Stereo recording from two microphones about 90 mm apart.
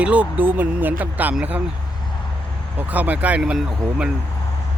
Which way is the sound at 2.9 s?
15° right (ahead or behind).